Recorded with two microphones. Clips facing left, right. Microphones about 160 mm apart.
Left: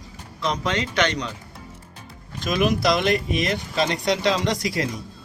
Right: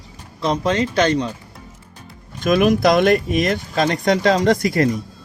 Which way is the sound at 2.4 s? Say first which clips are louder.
Right 6 dB; 50° right (ahead or behind).